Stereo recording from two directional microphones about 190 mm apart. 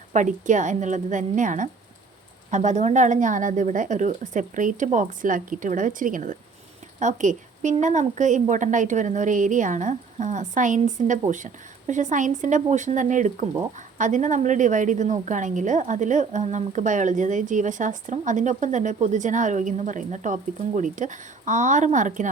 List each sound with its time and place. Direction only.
0.1 s a woman's voice: 40° right (ahead or behind)